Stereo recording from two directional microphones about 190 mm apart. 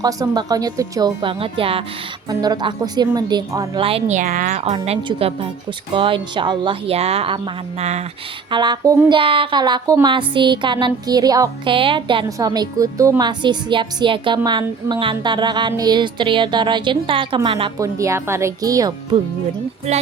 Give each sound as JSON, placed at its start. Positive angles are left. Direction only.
{"t": 0.0, "sound": "speech", "side_deg": -20}
{"t": 3.8, "sound": "a woman's voice", "side_deg": -35}
{"t": 8.4, "sound": "speech", "side_deg": -25}
{"t": 17.8, "sound": "speech", "side_deg": -15}
{"t": 19.9, "sound": "a woman's voice", "side_deg": -35}